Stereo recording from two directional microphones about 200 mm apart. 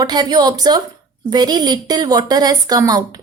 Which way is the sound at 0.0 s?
20° right (ahead or behind).